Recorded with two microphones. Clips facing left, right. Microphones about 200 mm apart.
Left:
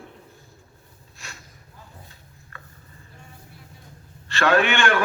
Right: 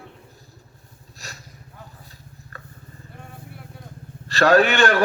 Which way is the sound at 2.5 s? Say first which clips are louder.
Right 3 dB; 40° right (ahead or behind).